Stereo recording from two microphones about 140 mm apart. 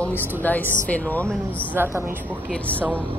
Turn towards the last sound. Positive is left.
turn(degrees=-15)  # may be behind; listen again after turning